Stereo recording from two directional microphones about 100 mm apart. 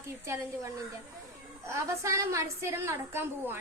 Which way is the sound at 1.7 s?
30° right (ahead or behind).